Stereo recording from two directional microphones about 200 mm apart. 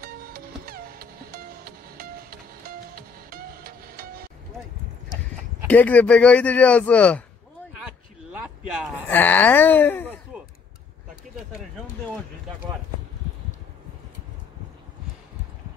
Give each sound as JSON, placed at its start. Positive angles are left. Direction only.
{"t": 0.0, "sound": "music", "side_deg": -50}
{"t": 5.7, "sound": "speech", "side_deg": 10}
{"t": 9.1, "sound": "speech", "side_deg": 10}